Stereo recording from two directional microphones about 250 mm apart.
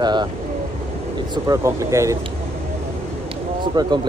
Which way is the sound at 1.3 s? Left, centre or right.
Centre.